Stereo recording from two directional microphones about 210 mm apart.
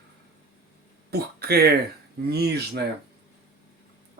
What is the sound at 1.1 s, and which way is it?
Speech, 50° right (ahead or behind).